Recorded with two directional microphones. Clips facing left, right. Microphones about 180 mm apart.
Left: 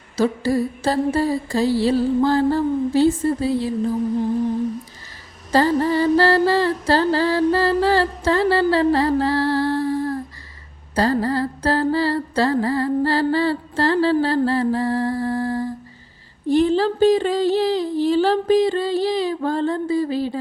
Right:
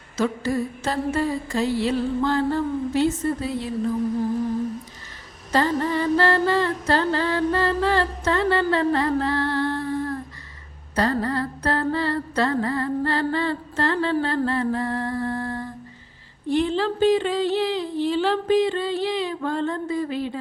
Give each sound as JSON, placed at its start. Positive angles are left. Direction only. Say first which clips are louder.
{"t": 0.2, "sound": "mantra", "louder": "left 4 dB", "side_deg": 35}
{"t": 5.5, "sound": "mantra", "louder": "left 4 dB", "side_deg": 35}